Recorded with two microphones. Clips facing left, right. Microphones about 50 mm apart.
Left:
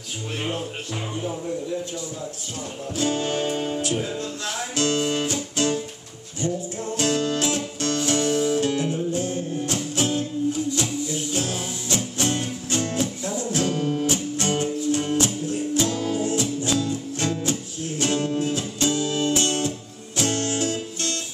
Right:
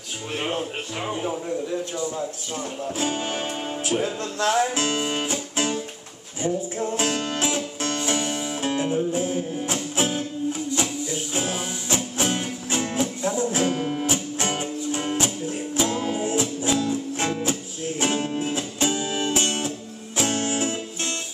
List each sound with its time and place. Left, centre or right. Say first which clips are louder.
1.0 s speech: right 3 dB; right
3.0 s music: left 4 dB; centre
4.0 s music: right 3 dB; right
4.5 s music: right 4 dB; right